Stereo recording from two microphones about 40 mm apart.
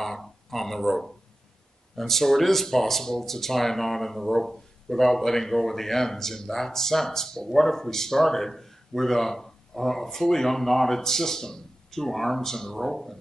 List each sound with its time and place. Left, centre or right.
0.0 s speech: centre